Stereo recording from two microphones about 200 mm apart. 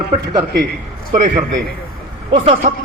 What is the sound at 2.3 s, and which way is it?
Speech, 25° right (ahead or behind).